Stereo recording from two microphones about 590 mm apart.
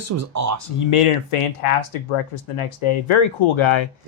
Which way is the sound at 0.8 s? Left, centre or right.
Left.